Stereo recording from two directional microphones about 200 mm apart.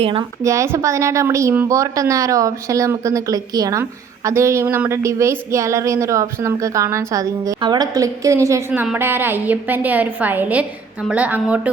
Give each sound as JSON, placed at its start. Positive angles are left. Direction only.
{"t": 0.0, "sound": "speech", "side_deg": -25}
{"t": 0.4, "sound": "a woman's voice", "side_deg": -15}